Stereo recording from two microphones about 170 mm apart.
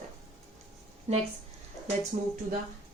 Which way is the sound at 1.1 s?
40° right (ahead or behind).